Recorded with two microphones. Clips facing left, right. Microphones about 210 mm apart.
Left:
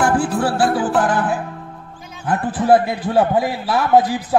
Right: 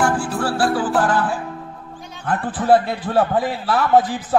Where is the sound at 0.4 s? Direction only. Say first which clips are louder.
Left 2 dB; 20° left (ahead or behind).